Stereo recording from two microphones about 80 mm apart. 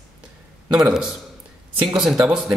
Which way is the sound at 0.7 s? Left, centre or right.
Centre.